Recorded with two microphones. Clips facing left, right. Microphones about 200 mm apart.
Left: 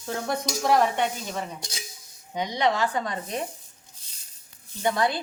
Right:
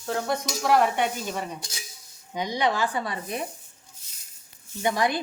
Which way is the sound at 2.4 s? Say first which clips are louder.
Left 1 dB; 10° right (ahead or behind).